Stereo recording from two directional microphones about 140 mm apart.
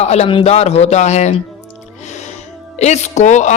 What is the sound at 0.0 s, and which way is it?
Speech, 50° left (ahead or behind).